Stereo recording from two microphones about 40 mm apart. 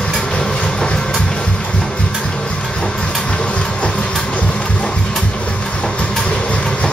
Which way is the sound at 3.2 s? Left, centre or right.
Left.